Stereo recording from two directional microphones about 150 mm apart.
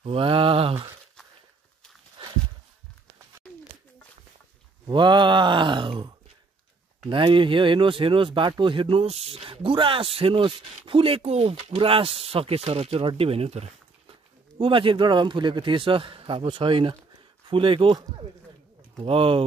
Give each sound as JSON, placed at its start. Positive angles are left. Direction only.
{"t": 0.0, "sound": "mantra", "side_deg": -35}
{"t": 2.2, "sound": "a sound", "side_deg": -40}
{"t": 4.8, "sound": "groan", "side_deg": -30}
{"t": 7.1, "sound": "speech", "side_deg": -35}